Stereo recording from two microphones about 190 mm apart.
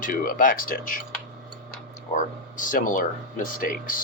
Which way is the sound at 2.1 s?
45° left (ahead or behind).